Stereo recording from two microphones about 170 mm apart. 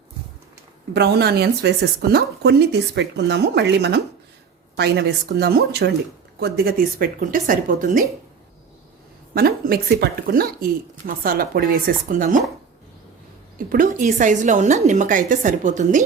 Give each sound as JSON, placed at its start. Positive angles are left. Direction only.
{"t": 0.9, "sound": "a woman's voice", "side_deg": -75}
{"t": 9.3, "sound": "a woman's voice", "side_deg": -60}
{"t": 13.7, "sound": "a woman's voice", "side_deg": -50}